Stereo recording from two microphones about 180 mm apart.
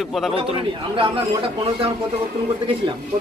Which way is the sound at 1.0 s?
30° right (ahead or behind).